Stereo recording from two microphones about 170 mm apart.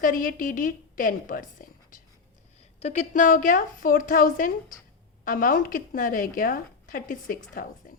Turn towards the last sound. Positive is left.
turn(degrees=55)  # may be behind; listen again after turning